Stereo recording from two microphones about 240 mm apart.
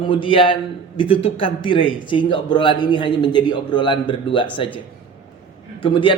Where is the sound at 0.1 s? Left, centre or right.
Left.